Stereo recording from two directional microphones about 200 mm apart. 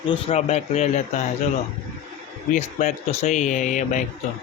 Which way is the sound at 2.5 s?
35° left (ahead or behind).